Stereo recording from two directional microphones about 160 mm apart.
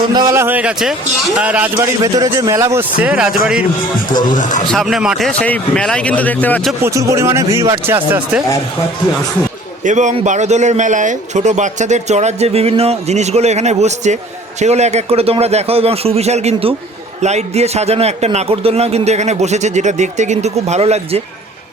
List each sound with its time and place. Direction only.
0.1 s speech: 25° right (ahead or behind)
2.0 s a man's voice: 20° right (ahead or behind); by 3.7 s 5° right (ahead or behind)
4.4 s speech: 50° left (ahead or behind)
4.7 s a man's voice: centre (ahead or behind)
6.8 s speech: 15° right (ahead or behind)
9.8 s a man's voice: 50° right (ahead or behind)